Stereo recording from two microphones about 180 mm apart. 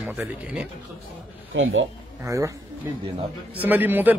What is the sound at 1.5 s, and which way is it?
Speech, 90° right.